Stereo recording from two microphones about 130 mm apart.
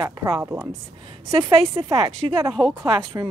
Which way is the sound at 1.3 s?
45° right (ahead or behind).